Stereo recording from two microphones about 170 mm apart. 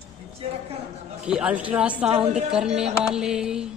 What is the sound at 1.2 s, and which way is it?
A woman's voice, 5° right (ahead or behind).